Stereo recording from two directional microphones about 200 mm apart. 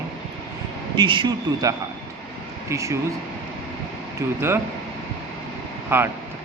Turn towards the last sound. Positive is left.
turn(degrees=-10)  # may be behind; listen again after turning